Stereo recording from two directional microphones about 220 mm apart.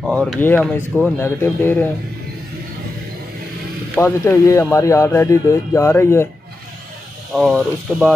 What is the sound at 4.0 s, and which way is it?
Speech, 10° left (ahead or behind).